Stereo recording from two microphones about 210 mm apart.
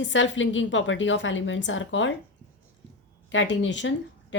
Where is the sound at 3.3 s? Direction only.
60° left (ahead or behind).